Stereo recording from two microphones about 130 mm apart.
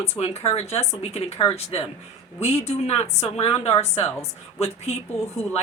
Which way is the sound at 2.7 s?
55° left (ahead or behind).